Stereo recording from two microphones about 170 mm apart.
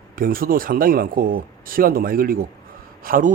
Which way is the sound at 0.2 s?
55° right (ahead or behind).